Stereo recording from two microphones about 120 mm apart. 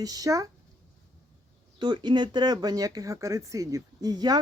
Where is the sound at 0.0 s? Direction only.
30° right (ahead or behind).